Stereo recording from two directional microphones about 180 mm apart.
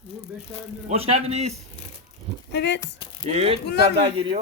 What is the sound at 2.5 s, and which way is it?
Speech, 75° left (ahead or behind).